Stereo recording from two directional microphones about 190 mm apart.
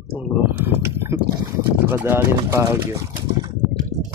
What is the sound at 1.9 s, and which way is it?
Speech, 10° right (ahead or behind).